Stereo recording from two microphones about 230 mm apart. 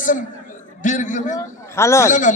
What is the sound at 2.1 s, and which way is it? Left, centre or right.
Speech, left.